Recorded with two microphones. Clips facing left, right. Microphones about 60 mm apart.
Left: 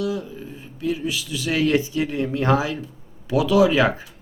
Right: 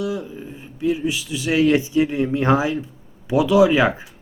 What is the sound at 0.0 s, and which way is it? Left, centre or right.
Speech, right.